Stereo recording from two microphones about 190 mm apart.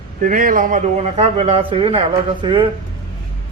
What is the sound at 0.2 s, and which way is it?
A man's voice, 45° right (ahead or behind).